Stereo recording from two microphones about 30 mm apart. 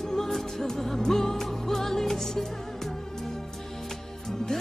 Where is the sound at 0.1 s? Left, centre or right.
Centre.